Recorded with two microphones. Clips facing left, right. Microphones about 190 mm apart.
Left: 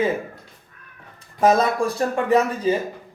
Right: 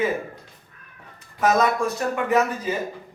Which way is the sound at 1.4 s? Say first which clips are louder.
Left 2 dB; 30° left (ahead or behind).